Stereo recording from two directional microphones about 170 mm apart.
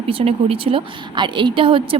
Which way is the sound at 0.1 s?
35° right (ahead or behind).